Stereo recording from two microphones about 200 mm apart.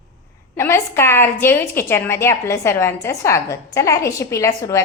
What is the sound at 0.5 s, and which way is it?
A woman's voice, 15° left (ahead or behind).